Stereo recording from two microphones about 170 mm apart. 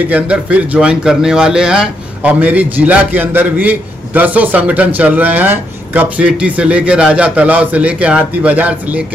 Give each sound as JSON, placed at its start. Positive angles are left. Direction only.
{"t": 0.1, "sound": "speech", "side_deg": -10}